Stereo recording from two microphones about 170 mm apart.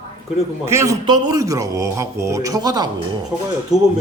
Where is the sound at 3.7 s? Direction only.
Centre (ahead or behind).